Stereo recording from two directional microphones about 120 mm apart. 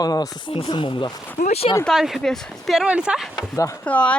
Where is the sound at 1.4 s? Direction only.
60° left (ahead or behind).